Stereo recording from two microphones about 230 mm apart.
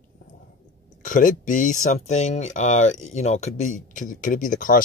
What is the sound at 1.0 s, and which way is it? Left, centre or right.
Speech, left.